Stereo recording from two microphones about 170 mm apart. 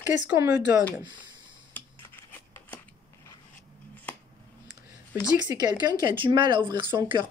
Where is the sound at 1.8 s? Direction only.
10° left (ahead or behind).